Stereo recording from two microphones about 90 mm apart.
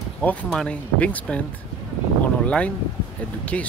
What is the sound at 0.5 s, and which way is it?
Speech, 10° left (ahead or behind).